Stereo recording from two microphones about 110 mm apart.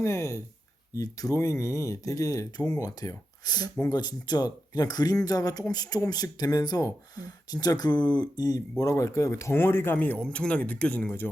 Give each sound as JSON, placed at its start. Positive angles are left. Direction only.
{"t": 0.0, "sound": "speech", "side_deg": 25}